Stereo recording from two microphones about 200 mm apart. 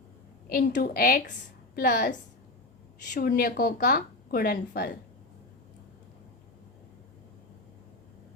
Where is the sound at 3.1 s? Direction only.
45° left (ahead or behind).